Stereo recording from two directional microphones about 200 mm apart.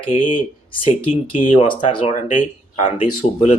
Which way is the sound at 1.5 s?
25° left (ahead or behind).